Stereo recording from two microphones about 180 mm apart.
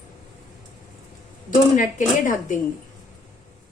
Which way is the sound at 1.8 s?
45° left (ahead or behind).